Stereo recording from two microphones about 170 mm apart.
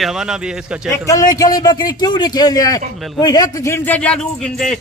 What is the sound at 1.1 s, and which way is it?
A man's voice, 20° left (ahead or behind).